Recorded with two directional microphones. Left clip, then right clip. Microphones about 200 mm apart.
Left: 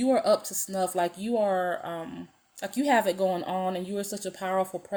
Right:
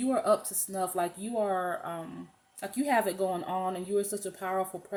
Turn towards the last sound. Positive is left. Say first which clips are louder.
# left 4 dB
turn(degrees=45)  # may be behind; listen again after turning